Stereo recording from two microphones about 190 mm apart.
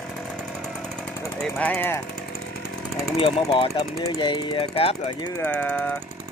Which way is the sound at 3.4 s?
20° left (ahead or behind).